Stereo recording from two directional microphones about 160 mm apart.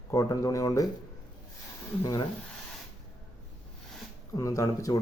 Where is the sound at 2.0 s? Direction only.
25° left (ahead or behind).